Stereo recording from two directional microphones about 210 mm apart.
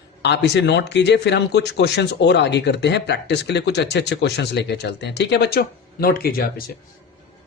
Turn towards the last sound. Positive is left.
turn(degrees=45)  # may be behind; listen again after turning